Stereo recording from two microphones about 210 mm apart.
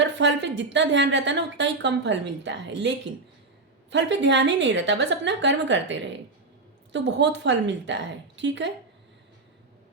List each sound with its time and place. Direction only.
0.0 s a woman's voice: 55° right (ahead or behind)